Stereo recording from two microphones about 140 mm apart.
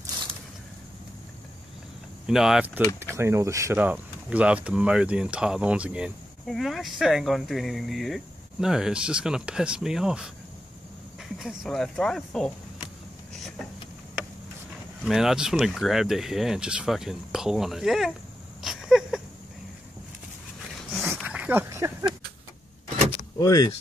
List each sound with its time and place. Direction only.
2.2 s speech: 5° right (ahead or behind)
3.0 s speech: 20° right (ahead or behind); by 12.5 s 5° left (ahead or behind)
15.0 s speech: 5° right (ahead or behind)
18.6 s a sound: 5° right (ahead or behind)
21.0 s dog: 10° right (ahead or behind)
21.6 s speech: 20° right (ahead or behind)
23.3 s speech: 25° left (ahead or behind)